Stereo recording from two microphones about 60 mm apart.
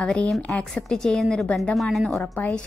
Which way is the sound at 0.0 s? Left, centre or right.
Centre.